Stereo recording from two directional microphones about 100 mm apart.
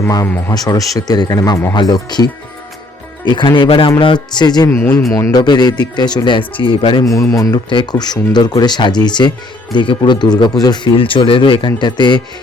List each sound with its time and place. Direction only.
0.0 s speech: 30° left (ahead or behind); by 3.9 s 60° left (ahead or behind)
4.0 s speech: 50° left (ahead or behind)
6.6 s speech: 60° left (ahead or behind)
7.0 s speech: 35° left (ahead or behind)
7.7 s speech: 50° left (ahead or behind)
10.9 s speech: 60° left (ahead or behind)